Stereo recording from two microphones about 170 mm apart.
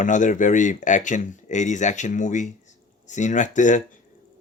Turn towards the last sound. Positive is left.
turn(degrees=45)  # may be behind; listen again after turning